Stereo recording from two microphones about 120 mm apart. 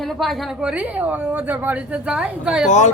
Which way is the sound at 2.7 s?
90° left.